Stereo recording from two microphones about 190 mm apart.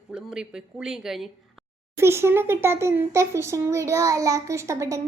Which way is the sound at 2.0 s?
15° right (ahead or behind).